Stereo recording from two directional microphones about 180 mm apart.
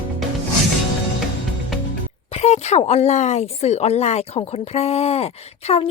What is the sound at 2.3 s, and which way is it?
A woman's voice, 35° left (ahead or behind).